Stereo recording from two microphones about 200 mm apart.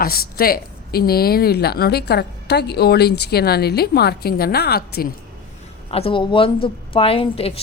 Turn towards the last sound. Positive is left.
turn(degrees=30)  # may be behind; listen again after turning